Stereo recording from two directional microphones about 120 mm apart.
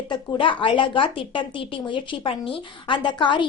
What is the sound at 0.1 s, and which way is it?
A woman's voice, 45° left (ahead or behind).